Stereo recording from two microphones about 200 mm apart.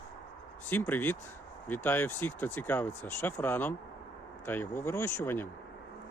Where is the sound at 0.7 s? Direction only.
10° left (ahead or behind).